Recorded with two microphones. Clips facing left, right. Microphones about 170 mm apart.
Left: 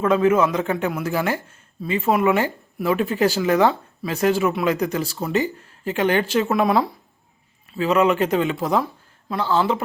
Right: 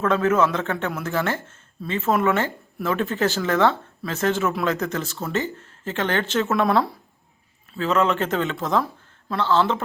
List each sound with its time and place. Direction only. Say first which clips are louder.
0.0 s speech: left 2 dB; 10° left (ahead or behind)